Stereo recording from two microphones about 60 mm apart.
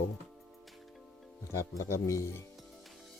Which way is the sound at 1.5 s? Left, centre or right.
Left.